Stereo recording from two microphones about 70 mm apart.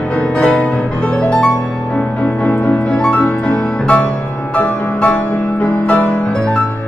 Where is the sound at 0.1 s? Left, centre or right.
Centre.